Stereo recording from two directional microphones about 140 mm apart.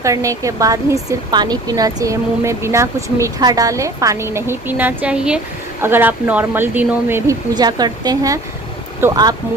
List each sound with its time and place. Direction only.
0.0 s a woman's voice: 25° right (ahead or behind)
7.5 s a woman's voice: 30° right (ahead or behind)